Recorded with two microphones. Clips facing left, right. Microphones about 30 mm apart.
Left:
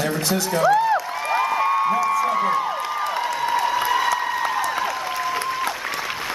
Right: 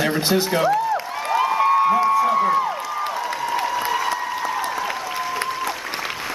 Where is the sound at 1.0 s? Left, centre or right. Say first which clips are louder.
Right 1 dB; centre.